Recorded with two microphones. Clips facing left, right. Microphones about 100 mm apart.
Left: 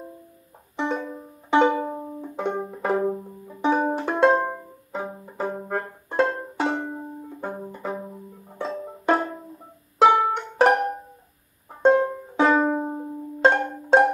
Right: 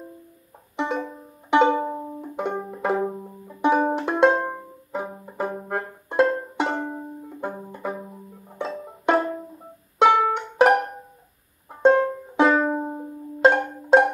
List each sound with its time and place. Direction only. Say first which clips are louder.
0.7 s music: even; centre (ahead or behind)
1.9 s banjo: right 1 dB; 5° right (ahead or behind)
3.6 s music: right 2 dB; 5° right (ahead or behind)
8.5 s music: even; centre (ahead or behind)